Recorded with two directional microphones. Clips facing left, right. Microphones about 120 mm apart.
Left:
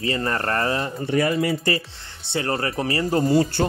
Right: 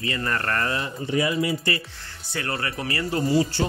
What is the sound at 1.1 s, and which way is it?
Speech, 50° left (ahead or behind).